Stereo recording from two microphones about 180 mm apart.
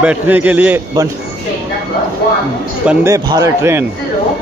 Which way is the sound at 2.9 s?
15° right (ahead or behind).